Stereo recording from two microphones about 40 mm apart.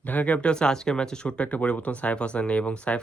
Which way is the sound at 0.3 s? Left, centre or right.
Left.